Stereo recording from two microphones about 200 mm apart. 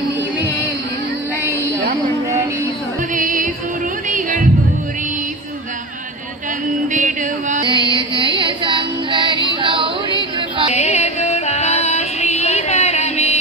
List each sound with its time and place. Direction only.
3.2 s music: 40° right (ahead or behind)
6.9 s music: 40° right (ahead or behind)
7.6 s music: 25° right (ahead or behind)
10.7 s music: 35° left (ahead or behind)